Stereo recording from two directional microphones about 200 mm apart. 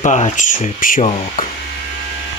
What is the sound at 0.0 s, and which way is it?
Speech, 35° left (ahead or behind).